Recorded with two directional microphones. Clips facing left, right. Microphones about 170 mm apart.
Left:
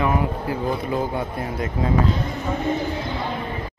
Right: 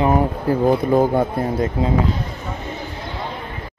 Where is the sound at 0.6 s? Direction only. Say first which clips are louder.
Right 10 dB; 45° right (ahead or behind).